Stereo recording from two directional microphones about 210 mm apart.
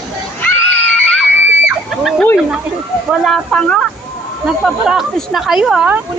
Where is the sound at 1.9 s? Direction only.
5° left (ahead or behind).